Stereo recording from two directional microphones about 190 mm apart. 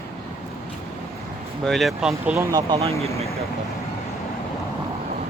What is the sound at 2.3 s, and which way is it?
Speech, 20° right (ahead or behind).